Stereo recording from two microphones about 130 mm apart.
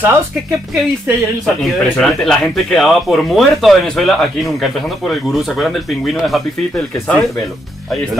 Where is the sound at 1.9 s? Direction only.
5° left (ahead or behind).